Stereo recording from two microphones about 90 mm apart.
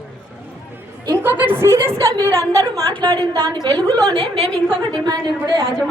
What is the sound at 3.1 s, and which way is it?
Speech, 45° right (ahead or behind).